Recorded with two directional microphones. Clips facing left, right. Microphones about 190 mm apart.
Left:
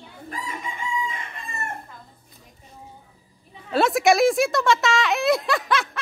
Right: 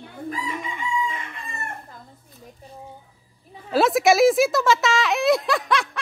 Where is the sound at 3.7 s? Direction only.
Centre (ahead or behind).